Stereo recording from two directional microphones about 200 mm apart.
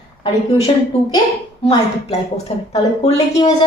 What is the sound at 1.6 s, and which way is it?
A woman's voice, 30° left (ahead or behind).